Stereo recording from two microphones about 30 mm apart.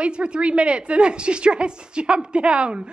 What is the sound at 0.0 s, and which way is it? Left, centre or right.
A woman's voice, right.